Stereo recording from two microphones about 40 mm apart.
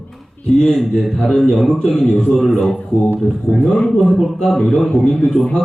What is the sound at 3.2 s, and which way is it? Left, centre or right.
Speech, centre.